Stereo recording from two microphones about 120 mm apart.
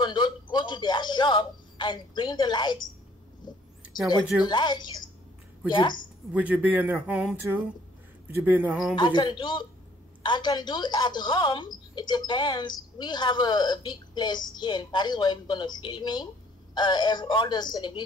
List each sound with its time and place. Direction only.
0.0 s a sound: 40° left (ahead or behind)
4.5 s speech: 40° left (ahead or behind)
6.3 s speech: 15° right (ahead or behind)
8.5 s speech: 10° right (ahead or behind)
8.9 s speech: 40° left (ahead or behind)